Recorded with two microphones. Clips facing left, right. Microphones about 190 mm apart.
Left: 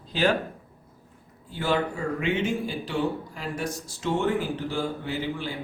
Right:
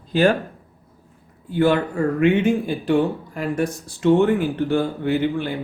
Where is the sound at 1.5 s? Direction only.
55° right (ahead or behind).